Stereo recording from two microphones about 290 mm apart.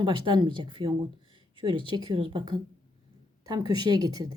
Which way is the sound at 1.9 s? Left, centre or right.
Centre.